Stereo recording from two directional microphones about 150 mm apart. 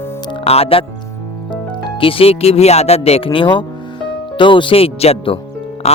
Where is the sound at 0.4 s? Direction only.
40° left (ahead or behind).